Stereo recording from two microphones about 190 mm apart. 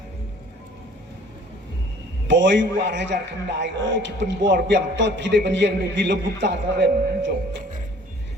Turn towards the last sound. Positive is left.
turn(degrees=-65)  # may be behind; listen again after turning